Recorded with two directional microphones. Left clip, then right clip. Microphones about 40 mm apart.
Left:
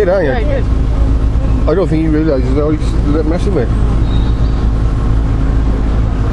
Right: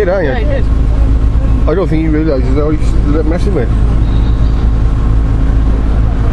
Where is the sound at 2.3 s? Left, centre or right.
Centre.